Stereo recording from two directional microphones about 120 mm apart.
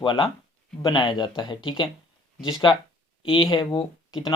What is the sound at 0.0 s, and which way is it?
Speech, 40° left (ahead or behind).